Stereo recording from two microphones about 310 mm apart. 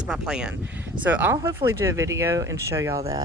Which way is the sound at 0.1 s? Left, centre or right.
Centre.